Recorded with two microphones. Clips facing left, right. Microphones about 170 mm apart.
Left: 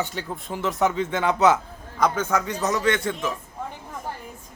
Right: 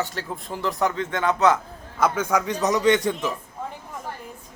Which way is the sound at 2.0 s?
10° right (ahead or behind).